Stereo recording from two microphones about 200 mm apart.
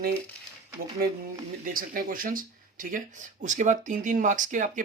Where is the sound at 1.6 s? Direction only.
45° right (ahead or behind).